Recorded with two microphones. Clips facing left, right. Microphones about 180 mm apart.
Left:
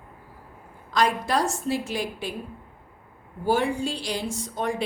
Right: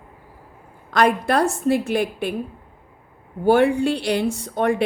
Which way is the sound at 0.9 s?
60° right (ahead or behind).